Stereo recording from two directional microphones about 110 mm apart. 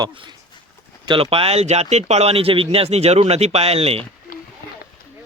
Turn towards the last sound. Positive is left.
turn(degrees=-65)  # may be behind; listen again after turning